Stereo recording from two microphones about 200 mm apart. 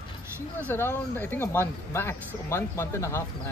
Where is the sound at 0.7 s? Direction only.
10° left (ahead or behind).